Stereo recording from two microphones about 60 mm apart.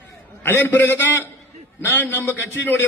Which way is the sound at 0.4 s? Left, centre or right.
Left.